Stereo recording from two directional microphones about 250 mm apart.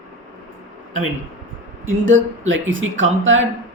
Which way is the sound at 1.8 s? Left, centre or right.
Right.